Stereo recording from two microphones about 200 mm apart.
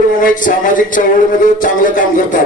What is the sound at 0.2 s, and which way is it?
Speech, 40° left (ahead or behind).